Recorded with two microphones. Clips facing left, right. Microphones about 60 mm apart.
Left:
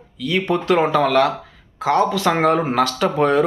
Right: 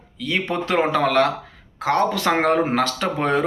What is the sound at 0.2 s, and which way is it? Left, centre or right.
Speech, right.